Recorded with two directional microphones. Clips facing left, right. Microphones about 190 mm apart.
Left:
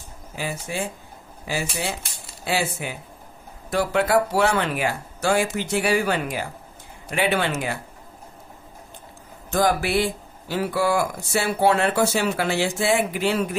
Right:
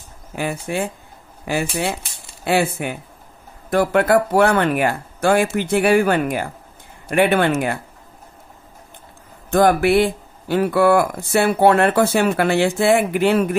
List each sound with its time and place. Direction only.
0.4 s speech: 60° right (ahead or behind)
9.5 s speech: 55° right (ahead or behind)